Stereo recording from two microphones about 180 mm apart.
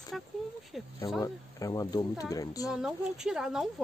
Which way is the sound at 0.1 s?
Centre (ahead or behind).